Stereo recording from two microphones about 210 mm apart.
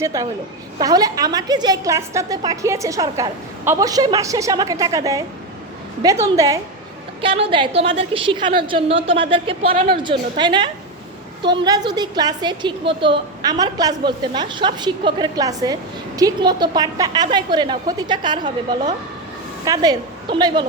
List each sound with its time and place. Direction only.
0.0 s a woman's voice: 15° right (ahead or behind)
19.6 s a woman's voice: 15° right (ahead or behind)